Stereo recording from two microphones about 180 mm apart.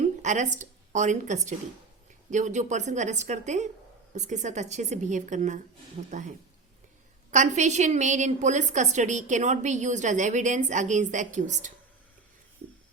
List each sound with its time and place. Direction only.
0.2 s a woman's voice: 40° right (ahead or behind)